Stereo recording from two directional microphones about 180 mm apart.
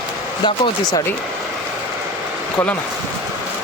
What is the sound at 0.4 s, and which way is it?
Speech, 25° left (ahead or behind).